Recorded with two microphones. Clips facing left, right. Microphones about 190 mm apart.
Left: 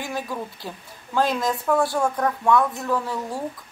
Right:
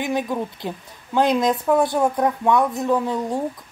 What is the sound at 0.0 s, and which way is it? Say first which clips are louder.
A woman's voice: right 6 dB; 20° right (ahead or behind).